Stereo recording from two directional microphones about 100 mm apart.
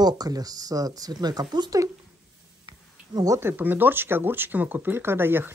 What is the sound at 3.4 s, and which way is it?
Speech, 20° right (ahead or behind).